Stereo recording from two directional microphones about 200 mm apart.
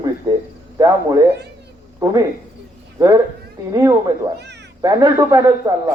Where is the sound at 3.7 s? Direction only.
15° right (ahead or behind).